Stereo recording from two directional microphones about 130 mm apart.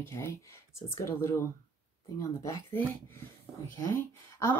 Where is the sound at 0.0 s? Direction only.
20° left (ahead or behind).